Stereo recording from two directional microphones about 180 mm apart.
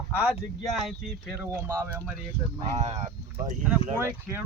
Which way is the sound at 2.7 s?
40° right (ahead or behind).